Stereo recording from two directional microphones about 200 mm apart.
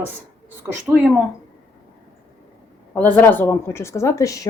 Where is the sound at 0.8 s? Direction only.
10° right (ahead or behind).